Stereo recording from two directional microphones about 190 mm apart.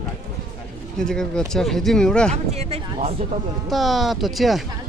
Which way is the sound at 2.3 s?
35° right (ahead or behind).